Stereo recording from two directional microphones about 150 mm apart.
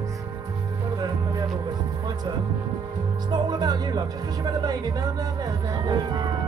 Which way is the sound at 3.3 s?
30° right (ahead or behind).